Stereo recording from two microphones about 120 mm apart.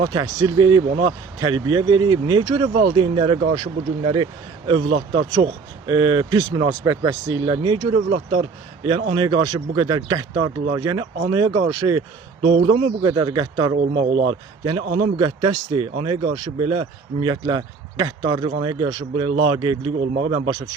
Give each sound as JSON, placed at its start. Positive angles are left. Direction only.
{"t": 0.0, "sound": "speech", "side_deg": -40}
{"t": 2.9, "sound": "speech", "side_deg": -50}
{"t": 6.8, "sound": "speech", "side_deg": -25}
{"t": 8.3, "sound": "speech", "side_deg": -50}
{"t": 9.2, "sound": "speech", "side_deg": -35}
{"t": 12.5, "sound": "speech", "side_deg": -45}
{"t": 13.9, "sound": "speech", "side_deg": -45}